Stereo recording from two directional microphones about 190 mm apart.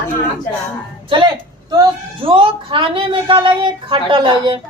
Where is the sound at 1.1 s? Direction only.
25° right (ahead or behind).